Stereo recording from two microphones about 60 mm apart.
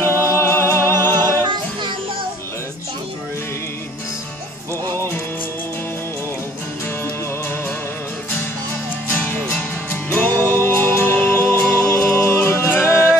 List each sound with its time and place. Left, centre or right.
0.0 s music: left
9.1 s music: left
10.6 s music: left
11.8 s music: left